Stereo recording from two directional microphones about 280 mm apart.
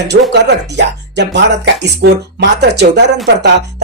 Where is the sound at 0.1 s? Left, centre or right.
Right.